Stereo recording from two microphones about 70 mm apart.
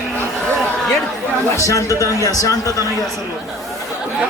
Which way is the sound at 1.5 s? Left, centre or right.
Left.